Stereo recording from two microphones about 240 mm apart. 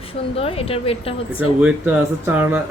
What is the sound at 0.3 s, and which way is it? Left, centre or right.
Speech, left.